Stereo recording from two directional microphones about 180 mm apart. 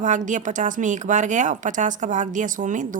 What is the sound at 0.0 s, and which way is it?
Speech, 45° right (ahead or behind).